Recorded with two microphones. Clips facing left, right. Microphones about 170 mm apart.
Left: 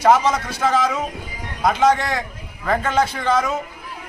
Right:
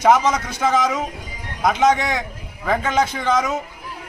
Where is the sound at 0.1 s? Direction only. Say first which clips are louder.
Even; 15° right (ahead or behind).